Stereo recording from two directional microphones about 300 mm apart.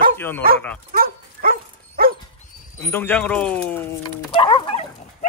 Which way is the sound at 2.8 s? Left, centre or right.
Centre.